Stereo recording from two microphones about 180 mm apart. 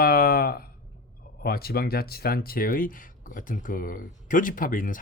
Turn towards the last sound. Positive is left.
turn(degrees=50)  # may be behind; listen again after turning